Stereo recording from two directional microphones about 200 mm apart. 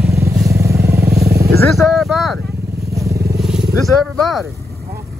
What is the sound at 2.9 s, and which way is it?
Vehicle, 15° right (ahead or behind).